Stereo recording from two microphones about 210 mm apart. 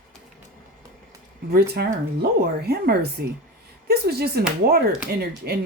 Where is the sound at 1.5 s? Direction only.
45° right (ahead or behind).